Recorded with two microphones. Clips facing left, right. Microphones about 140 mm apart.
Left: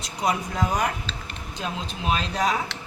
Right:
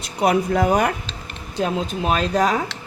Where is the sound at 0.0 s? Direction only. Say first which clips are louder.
Right 7 dB; 65° right (ahead or behind).